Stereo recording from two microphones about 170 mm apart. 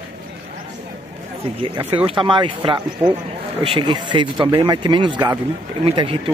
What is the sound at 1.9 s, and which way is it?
A man's voice, 30° right (ahead or behind).